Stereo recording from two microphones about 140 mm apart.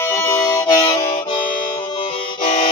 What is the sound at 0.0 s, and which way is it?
Music, 15° left (ahead or behind).